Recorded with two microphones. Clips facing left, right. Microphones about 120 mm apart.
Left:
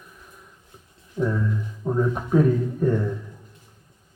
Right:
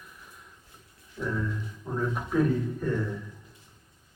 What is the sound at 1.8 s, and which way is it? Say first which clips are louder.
Speech: left 9 dB; 35° left (ahead or behind).